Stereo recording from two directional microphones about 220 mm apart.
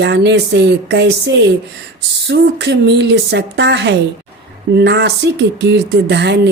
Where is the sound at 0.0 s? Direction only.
50° right (ahead or behind).